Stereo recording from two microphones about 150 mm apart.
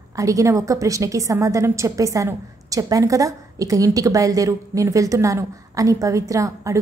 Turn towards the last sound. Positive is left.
turn(degrees=-20)  # may be behind; listen again after turning